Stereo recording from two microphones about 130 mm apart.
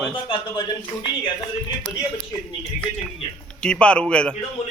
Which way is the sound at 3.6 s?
5° left (ahead or behind).